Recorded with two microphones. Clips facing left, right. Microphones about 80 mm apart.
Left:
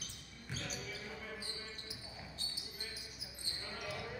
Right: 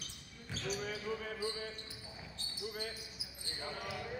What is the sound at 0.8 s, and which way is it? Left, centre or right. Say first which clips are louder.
Basketball bounce: right 7 dB; right.